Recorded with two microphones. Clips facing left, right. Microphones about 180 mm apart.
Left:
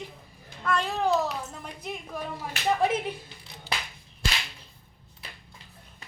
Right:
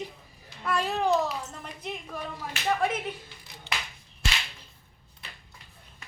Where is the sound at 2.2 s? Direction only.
20° left (ahead or behind).